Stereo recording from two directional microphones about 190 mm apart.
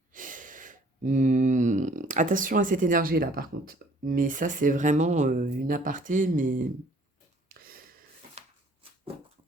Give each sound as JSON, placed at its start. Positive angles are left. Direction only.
{"t": 0.1, "sound": "speech", "side_deg": -45}
{"t": 7.4, "sound": "a sound", "side_deg": -50}
{"t": 8.4, "sound": "shuffling cards", "side_deg": -35}